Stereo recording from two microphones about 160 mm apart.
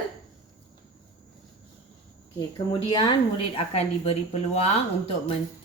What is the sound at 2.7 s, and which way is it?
A woman's voice, 30° left (ahead or behind).